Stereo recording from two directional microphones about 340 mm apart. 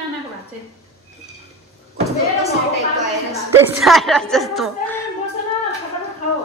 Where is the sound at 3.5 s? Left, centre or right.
Centre.